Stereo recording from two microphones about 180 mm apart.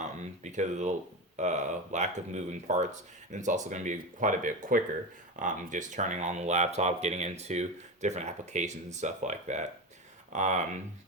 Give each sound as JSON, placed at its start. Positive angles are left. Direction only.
{"t": 0.0, "sound": "speech", "side_deg": -40}